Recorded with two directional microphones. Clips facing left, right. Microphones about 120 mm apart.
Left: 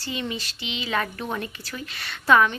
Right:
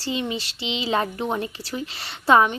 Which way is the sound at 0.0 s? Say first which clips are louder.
Right 4 dB; 25° right (ahead or behind).